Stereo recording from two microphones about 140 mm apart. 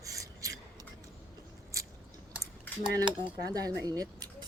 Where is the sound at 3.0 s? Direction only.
25° right (ahead or behind).